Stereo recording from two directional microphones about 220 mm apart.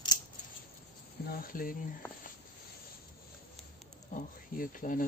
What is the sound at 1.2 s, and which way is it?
Speech, 40° left (ahead or behind).